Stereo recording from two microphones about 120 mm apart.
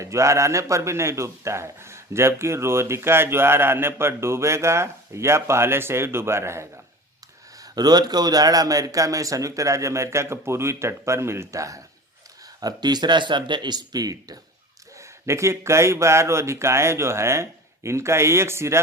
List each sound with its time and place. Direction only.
0.0 s a man's voice: 25° right (ahead or behind)
7.6 s a man's voice: 35° right (ahead or behind)